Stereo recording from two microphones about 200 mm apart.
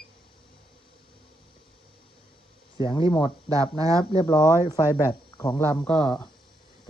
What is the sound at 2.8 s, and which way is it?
Speech, 25° left (ahead or behind).